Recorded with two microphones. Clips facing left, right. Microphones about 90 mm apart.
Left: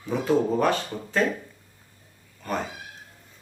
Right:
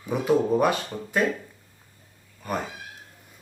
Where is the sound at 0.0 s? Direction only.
15° right (ahead or behind).